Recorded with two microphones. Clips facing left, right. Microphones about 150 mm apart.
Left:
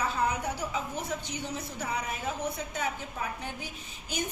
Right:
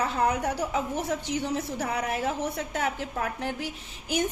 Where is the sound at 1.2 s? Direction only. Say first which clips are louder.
Right 7 dB; 85° right.